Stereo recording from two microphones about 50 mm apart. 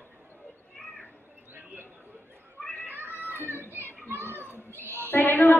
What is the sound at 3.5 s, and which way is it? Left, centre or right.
Children playing, right.